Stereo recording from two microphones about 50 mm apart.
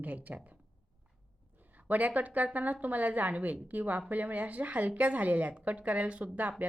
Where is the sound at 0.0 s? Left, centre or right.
Right.